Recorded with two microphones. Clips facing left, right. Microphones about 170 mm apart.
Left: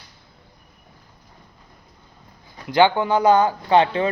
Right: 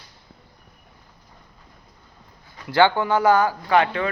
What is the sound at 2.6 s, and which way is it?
Speech, 15° left (ahead or behind).